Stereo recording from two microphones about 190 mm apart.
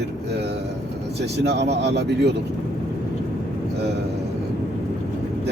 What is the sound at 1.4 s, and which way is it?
Speech, 60° right (ahead or behind).